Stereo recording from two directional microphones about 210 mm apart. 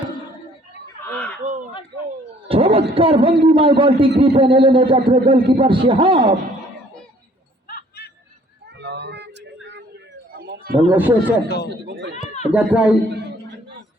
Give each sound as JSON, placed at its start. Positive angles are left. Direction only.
{"t": 1.1, "sound": "a sound", "side_deg": 5}
{"t": 1.5, "sound": "a sound", "side_deg": -40}
{"t": 2.5, "sound": "speech", "side_deg": -25}
{"t": 7.7, "sound": "hubbub", "side_deg": 45}
{"t": 8.8, "sound": "a sound", "side_deg": -55}
{"t": 10.9, "sound": "a man's voice", "side_deg": -10}
{"t": 11.4, "sound": "speech", "side_deg": 50}
{"t": 11.9, "sound": "speech", "side_deg": -55}
{"t": 12.5, "sound": "speech", "side_deg": -5}